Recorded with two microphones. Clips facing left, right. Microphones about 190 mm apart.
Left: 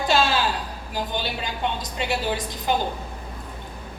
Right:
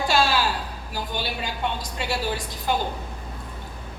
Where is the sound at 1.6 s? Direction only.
20° left (ahead or behind).